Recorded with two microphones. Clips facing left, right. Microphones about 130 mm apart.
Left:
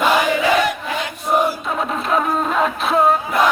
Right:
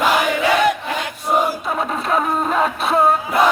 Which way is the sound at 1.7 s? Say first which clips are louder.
Even; centre (ahead or behind).